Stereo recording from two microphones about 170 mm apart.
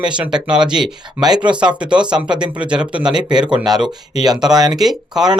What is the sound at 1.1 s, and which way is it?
Speech, 25° right (ahead or behind).